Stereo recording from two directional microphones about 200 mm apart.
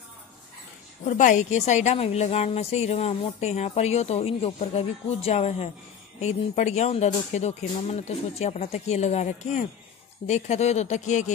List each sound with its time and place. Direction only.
1.0 s a woman's voice: 40° left (ahead or behind)